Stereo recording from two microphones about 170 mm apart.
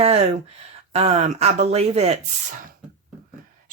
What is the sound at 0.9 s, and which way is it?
Speech, 40° right (ahead or behind).